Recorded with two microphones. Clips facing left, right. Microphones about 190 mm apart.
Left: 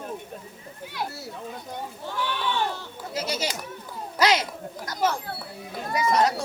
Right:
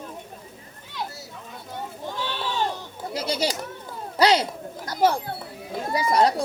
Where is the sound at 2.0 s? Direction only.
25° right (ahead or behind).